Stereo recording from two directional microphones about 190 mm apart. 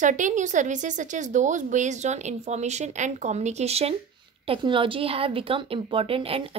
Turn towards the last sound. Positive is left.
turn(degrees=-30)  # may be behind; listen again after turning